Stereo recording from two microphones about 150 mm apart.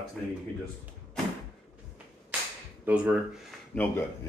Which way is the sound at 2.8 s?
10° right (ahead or behind).